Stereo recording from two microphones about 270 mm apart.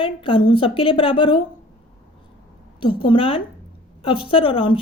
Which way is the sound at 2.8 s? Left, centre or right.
Centre.